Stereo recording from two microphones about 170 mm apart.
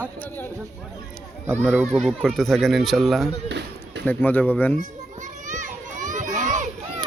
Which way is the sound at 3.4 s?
85° right.